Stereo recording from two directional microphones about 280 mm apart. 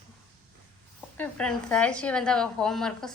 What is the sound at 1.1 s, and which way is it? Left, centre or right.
A woman's voice, centre.